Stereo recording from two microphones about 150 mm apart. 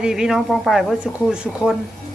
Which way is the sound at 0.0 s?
5° right (ahead or behind).